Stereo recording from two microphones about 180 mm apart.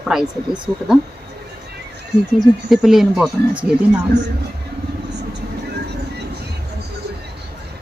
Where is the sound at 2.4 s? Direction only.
Centre (ahead or behind).